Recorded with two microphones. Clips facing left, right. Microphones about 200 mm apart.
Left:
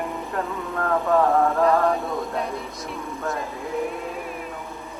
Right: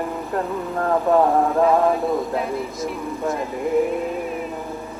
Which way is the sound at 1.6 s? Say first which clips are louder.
Right 3 dB; 5° right (ahead or behind).